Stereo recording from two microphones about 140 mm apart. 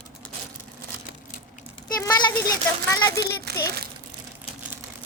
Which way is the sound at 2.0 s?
20° left (ahead or behind).